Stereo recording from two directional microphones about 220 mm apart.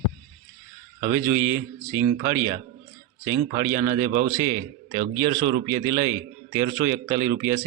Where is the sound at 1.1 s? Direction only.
10° right (ahead or behind).